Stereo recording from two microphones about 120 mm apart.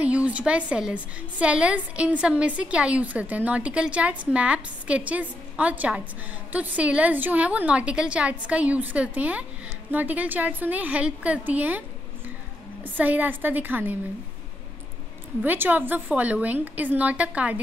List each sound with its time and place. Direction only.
0.0 s a woman's voice: 10° right (ahead or behind)
12.8 s a woman's voice: 15° right (ahead or behind)
15.4 s a woman's voice: 15° right (ahead or behind)